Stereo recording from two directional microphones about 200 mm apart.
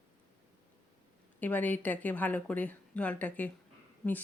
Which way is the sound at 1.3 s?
10° left (ahead or behind).